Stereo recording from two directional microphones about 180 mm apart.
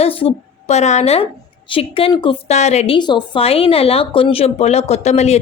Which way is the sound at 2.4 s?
40° left (ahead or behind).